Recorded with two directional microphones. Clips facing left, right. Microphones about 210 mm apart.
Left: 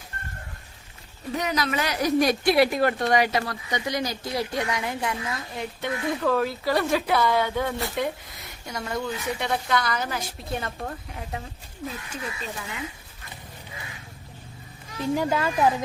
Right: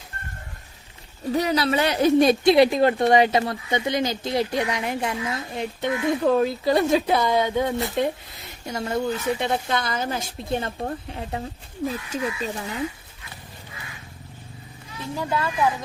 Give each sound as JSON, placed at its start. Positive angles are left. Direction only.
{"t": 1.3, "sound": "speech", "side_deg": -30}
{"t": 15.1, "sound": "a woman's voice", "side_deg": 20}